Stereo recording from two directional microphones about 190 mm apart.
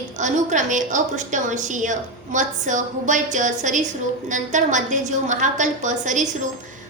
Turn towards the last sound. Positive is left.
turn(degrees=-40)  # may be behind; listen again after turning